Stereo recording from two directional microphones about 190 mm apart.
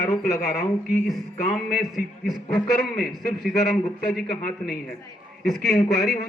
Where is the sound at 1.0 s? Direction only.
Centre (ahead or behind).